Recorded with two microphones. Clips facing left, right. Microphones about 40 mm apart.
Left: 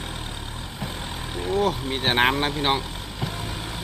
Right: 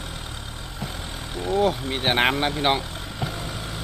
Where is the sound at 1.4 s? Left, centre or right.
Centre.